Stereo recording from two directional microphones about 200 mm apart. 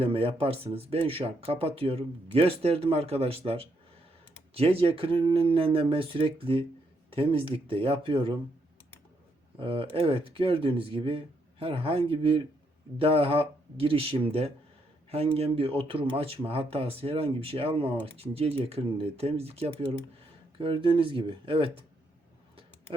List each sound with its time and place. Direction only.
0.0 s speech: 30° right (ahead or behind)
9.6 s speech: 25° right (ahead or behind)
22.5 s a sound: 25° right (ahead or behind)